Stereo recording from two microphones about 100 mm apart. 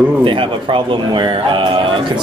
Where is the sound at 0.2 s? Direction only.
55° right (ahead or behind).